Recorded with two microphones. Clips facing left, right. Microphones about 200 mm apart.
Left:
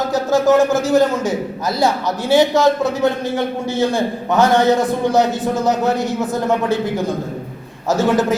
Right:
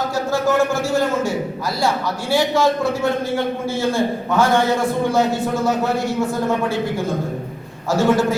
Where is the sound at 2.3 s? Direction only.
20° left (ahead or behind).